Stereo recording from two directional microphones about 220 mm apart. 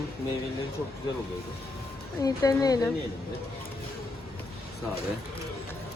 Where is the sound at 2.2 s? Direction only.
15° left (ahead or behind).